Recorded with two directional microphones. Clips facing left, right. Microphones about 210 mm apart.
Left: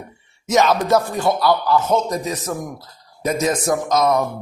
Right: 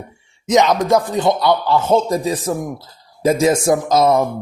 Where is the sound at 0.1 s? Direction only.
15° right (ahead or behind).